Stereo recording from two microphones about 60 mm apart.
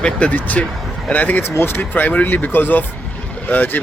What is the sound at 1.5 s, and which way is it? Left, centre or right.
Speech, left.